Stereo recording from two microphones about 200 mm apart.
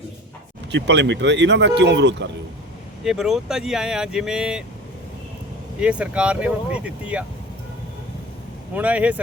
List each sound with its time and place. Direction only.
0.7 s speech: 60° right (ahead or behind)
3.0 s speech: centre (ahead or behind)
5.8 s speech: 5° right (ahead or behind)
8.7 s speech: 5° right (ahead or behind)